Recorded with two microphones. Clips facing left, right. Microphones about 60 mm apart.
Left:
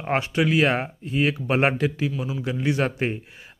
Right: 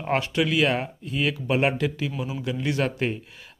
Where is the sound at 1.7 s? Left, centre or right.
Left.